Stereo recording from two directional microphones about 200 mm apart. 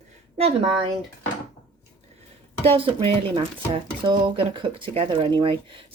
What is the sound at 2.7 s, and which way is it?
Speech, 25° right (ahead or behind).